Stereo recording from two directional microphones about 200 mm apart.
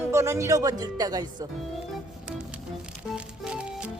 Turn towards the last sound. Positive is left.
turn(degrees=-5)  # may be behind; listen again after turning